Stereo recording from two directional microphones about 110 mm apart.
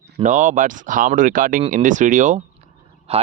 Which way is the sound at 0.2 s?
50° right (ahead or behind).